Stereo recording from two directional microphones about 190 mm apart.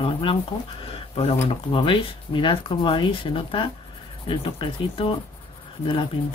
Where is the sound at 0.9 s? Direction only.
30° left (ahead or behind).